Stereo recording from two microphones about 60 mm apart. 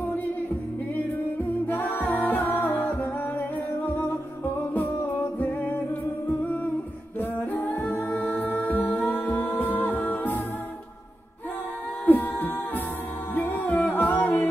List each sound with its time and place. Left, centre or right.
1.7 s music: left
6.2 s humming: left
7.2 s a capella: left
12.1 s music: left